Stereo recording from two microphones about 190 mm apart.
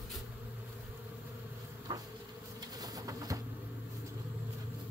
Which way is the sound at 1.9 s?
20° right (ahead or behind).